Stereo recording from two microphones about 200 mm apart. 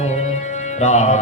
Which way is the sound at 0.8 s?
35° left (ahead or behind).